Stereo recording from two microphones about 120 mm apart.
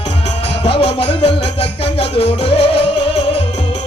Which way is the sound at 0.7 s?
55° left (ahead or behind).